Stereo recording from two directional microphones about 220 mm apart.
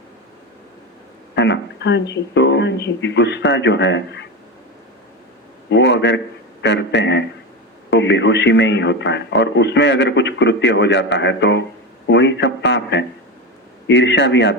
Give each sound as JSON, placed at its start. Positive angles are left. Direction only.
{"t": 1.4, "sound": "speech", "side_deg": 55}
{"t": 5.6, "sound": "a sound", "side_deg": 55}
{"t": 6.6, "sound": "speech", "side_deg": 55}